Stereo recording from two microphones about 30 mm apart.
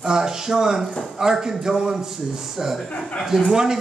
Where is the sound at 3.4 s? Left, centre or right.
Right.